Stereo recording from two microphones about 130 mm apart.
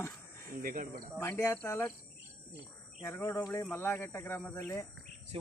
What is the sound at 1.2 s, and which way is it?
Speech, 20° left (ahead or behind).